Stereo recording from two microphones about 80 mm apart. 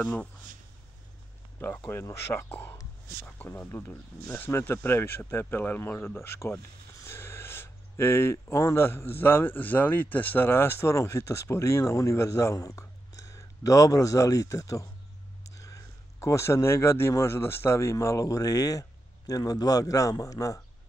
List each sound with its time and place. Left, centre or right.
0.0 s speech: centre
1.9 s speech: left